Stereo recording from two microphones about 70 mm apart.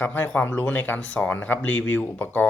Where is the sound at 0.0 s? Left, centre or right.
Left.